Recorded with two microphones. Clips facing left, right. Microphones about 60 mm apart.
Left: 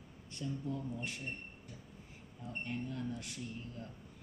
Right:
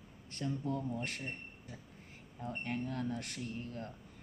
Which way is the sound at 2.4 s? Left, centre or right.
Right.